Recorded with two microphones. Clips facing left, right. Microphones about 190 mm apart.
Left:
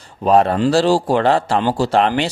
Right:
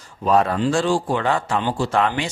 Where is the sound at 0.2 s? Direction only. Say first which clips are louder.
Left 4 dB; 30° left (ahead or behind).